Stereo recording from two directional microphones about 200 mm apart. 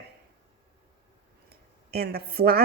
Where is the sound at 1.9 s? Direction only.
50° right (ahead or behind).